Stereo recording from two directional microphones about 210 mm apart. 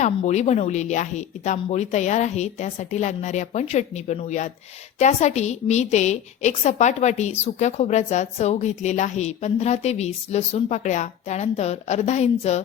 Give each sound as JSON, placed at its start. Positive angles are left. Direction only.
{"t": 0.0, "sound": "a woman's voice", "side_deg": 35}